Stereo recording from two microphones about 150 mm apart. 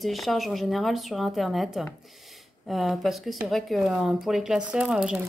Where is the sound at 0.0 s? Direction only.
Centre (ahead or behind).